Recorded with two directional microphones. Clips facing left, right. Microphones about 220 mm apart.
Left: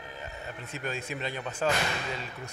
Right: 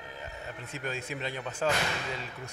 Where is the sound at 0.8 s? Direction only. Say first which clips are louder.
Left 1 dB; 20° left (ahead or behind).